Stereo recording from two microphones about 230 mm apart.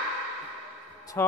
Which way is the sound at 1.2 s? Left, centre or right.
Centre.